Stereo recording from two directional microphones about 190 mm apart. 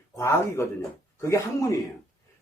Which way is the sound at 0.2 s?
15° left (ahead or behind).